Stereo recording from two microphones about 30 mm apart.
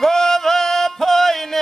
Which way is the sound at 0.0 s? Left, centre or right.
Centre.